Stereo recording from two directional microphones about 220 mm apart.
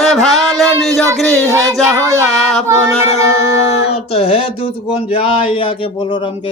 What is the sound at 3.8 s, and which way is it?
Speech, 25° left (ahead or behind).